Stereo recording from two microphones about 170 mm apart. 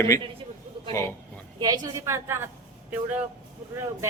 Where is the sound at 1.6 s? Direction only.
25° right (ahead or behind).